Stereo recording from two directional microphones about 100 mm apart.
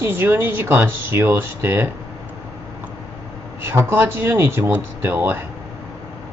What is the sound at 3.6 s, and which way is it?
Speech, 25° right (ahead or behind).